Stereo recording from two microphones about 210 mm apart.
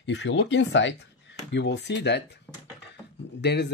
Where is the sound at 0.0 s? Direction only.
60° left (ahead or behind).